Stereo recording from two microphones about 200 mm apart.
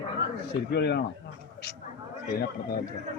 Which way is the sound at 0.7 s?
55° left (ahead or behind).